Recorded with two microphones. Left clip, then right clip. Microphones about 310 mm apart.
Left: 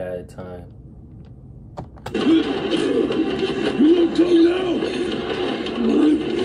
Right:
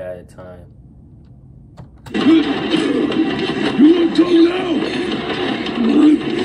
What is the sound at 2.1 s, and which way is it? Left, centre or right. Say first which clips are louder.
Music: right 4 dB; right.